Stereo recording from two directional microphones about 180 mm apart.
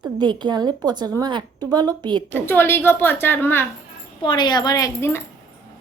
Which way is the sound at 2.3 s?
10° left (ahead or behind).